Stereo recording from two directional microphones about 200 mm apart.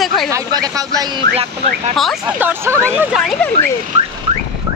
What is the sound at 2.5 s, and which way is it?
Speech, 10° right (ahead or behind).